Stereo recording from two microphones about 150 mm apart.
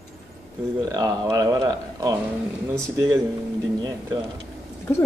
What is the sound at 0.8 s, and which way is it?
Speech, 25° right (ahead or behind).